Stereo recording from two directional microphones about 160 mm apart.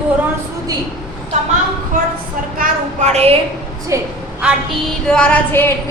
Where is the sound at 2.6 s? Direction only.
45° right (ahead or behind).